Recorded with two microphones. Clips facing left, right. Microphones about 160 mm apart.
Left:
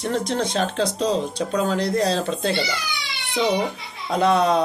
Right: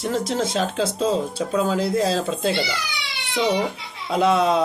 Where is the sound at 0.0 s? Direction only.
Centre (ahead or behind).